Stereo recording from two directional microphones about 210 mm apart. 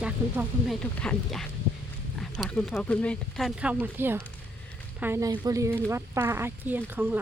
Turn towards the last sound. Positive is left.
turn(degrees=-10)  # may be behind; listen again after turning